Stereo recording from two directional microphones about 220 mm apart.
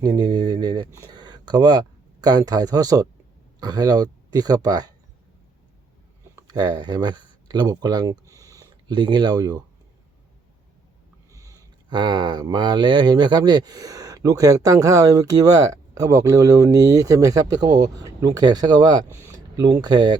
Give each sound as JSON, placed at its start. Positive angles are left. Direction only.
{"t": 0.0, "sound": "speech", "side_deg": -20}
{"t": 6.5, "sound": "speech", "side_deg": -20}
{"t": 11.3, "sound": "speech", "side_deg": -15}